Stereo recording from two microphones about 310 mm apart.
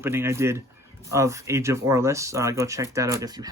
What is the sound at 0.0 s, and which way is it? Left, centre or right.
Speech, centre.